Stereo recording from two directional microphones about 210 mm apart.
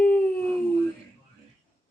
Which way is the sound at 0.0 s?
5° left (ahead or behind).